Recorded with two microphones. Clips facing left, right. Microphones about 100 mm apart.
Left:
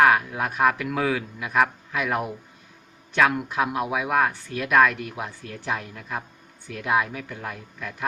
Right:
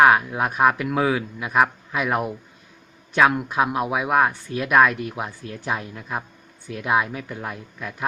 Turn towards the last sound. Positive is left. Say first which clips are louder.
# right 2 dB
turn(degrees=-20)  # may be behind; listen again after turning